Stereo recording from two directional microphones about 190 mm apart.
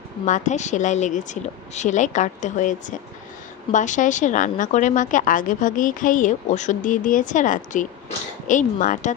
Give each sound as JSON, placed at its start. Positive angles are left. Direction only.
{"t": 0.3, "sound": "a woman's voice", "side_deg": 40}